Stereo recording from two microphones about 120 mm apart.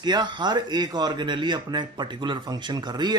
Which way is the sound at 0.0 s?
40° right (ahead or behind).